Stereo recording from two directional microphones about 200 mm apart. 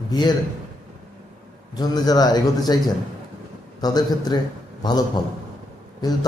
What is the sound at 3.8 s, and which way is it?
Speech, 20° left (ahead or behind).